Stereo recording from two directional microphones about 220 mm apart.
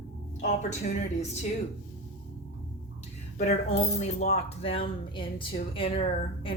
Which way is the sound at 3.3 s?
30° left (ahead or behind).